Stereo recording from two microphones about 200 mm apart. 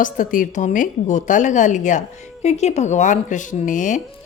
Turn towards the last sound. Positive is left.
turn(degrees=40)  # may be behind; listen again after turning